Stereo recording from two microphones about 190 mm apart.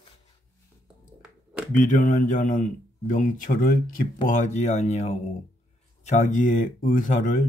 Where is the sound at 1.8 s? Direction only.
40° left (ahead or behind).